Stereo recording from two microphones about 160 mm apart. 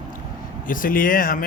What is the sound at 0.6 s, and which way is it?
Speech, 55° left (ahead or behind).